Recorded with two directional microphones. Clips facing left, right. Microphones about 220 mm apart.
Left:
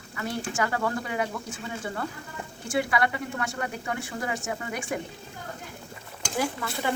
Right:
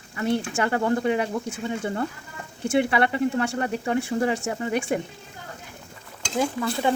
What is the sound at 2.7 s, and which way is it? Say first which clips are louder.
Speech: right 5 dB; 25° right (ahead or behind).